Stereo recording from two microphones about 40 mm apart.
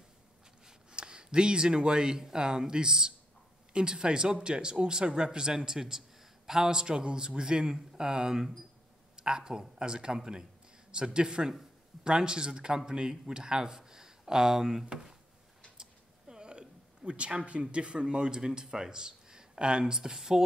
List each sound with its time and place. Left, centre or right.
0.7 s speech: right
15.8 s a sound: centre
17.5 s speech: right